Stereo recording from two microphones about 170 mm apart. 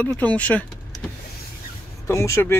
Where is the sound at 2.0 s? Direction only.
15° left (ahead or behind).